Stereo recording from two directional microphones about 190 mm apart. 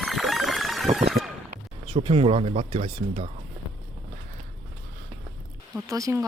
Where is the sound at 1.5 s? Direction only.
30° right (ahead or behind).